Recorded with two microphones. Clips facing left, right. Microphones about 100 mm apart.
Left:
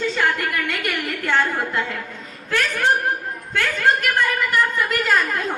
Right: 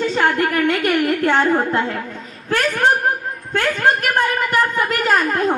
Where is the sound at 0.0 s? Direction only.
40° right (ahead or behind).